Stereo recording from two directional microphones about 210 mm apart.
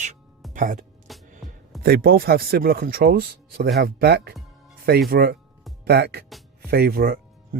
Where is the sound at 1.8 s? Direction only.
45° right (ahead or behind).